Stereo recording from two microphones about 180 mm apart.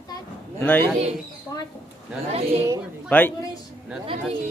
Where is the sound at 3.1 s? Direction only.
10° left (ahead or behind).